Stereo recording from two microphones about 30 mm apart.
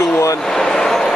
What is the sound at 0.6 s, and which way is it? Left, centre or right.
Speech, centre.